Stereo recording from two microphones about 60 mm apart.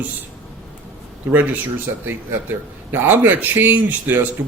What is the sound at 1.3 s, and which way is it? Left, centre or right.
Speech, right.